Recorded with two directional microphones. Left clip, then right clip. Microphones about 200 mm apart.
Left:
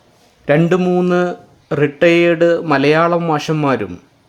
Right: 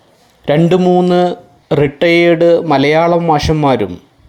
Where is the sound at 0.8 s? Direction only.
5° right (ahead or behind).